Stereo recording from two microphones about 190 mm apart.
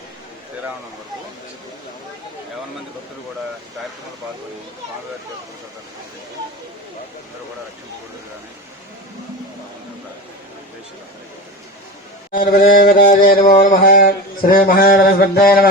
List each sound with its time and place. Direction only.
12.3 s chant: 50° left (ahead or behind)